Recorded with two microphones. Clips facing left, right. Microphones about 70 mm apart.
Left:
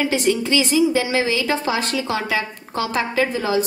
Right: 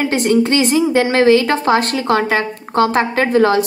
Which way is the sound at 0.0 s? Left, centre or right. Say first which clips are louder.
Right 5 dB; right.